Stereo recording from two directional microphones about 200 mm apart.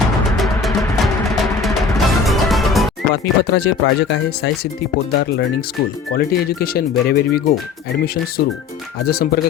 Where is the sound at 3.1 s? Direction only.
55° left (ahead or behind).